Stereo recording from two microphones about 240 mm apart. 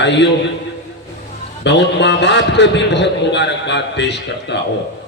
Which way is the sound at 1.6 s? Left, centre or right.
Left.